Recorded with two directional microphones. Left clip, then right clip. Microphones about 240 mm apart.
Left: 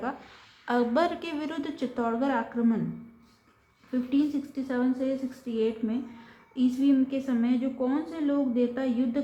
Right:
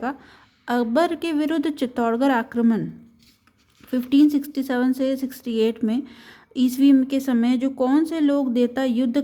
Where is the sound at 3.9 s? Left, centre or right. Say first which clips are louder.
Right 9 dB; right.